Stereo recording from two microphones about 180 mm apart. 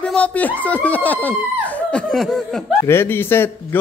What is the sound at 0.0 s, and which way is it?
Speech, 5° left (ahead or behind).